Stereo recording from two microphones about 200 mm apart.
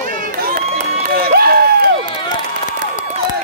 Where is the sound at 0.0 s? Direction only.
40° right (ahead or behind).